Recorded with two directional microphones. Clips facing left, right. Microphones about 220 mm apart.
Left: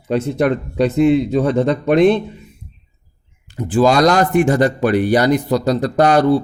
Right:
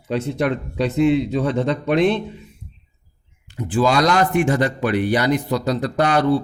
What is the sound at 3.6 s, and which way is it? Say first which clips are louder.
A man's voice: left 5 dB; 40° left (ahead or behind).